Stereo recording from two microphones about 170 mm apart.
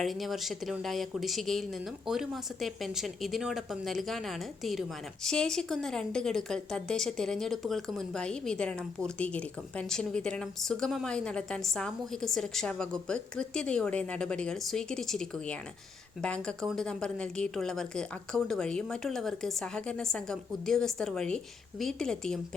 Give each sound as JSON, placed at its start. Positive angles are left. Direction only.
{"t": 0.0, "sound": "a woman's voice", "side_deg": 0}